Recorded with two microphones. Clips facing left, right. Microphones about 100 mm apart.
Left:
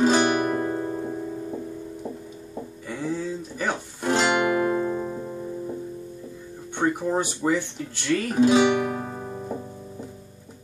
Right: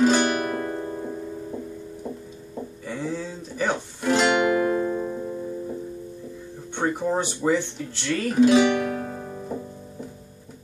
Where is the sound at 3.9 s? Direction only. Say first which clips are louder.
Right 1 dB; 30° left (ahead or behind).